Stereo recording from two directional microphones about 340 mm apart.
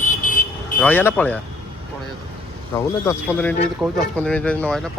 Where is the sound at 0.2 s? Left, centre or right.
Left.